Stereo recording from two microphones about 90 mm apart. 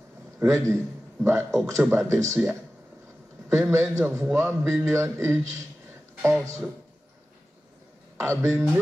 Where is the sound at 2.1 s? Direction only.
30° right (ahead or behind).